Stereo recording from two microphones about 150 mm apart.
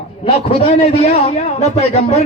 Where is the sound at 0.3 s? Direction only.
40° left (ahead or behind).